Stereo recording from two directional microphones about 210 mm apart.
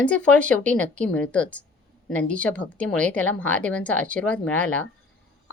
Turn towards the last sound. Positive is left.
turn(degrees=5)  # may be behind; listen again after turning